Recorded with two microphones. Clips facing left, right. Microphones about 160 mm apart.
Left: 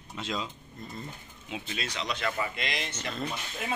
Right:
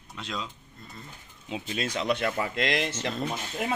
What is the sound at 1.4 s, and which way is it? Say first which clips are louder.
Speech: right 4 dB; 35° right (ahead or behind).